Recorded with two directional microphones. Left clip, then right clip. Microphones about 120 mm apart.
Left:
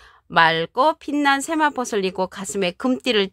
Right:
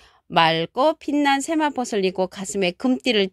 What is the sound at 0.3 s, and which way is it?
A woman's voice, 25° right (ahead or behind).